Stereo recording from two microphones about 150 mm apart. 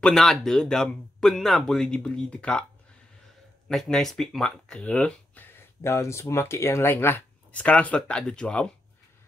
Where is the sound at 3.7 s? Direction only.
5° left (ahead or behind).